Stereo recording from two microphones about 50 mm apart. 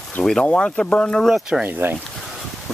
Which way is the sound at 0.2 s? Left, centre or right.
Centre.